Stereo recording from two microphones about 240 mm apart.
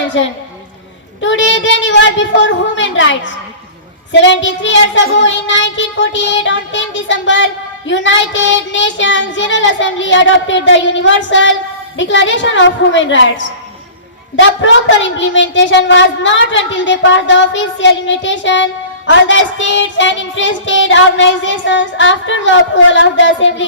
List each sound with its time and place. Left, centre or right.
0.1 s a woman's voice: left